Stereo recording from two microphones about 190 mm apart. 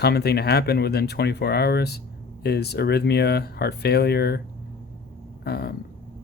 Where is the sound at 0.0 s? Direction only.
60° left (ahead or behind).